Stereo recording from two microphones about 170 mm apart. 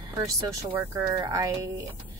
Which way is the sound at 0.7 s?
15° right (ahead or behind).